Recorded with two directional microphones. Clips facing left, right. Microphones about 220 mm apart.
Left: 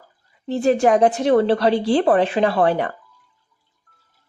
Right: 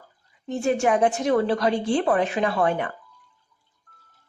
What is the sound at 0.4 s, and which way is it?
A woman's voice, 35° left (ahead or behind).